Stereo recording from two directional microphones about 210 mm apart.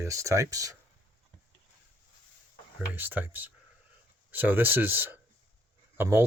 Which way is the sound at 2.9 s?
10° right (ahead or behind).